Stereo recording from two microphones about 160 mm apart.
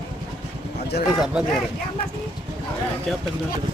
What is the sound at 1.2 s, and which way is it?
Speech, 5° right (ahead or behind).